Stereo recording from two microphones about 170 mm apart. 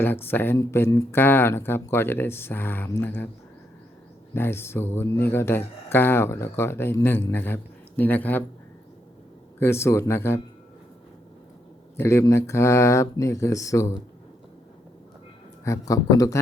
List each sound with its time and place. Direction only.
0.0 s a man's voice: 10° left (ahead or behind)
4.4 s a man's voice: 15° left (ahead or behind)
9.6 s a man's voice: 15° left (ahead or behind)
11.9 s a man's voice: 15° left (ahead or behind)
15.6 s speech: 20° left (ahead or behind)